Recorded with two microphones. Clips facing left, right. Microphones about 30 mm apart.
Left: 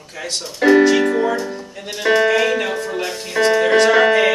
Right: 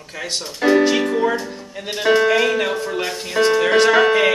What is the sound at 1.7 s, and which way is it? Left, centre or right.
Speech, centre.